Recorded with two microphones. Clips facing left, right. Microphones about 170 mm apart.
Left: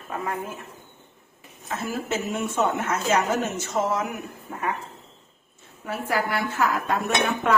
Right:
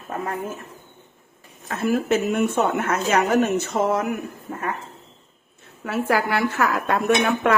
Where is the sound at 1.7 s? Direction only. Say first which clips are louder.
Right 7 dB; 60° right (ahead or behind).